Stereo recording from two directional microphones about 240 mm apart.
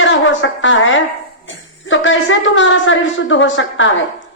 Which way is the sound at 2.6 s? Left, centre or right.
Left.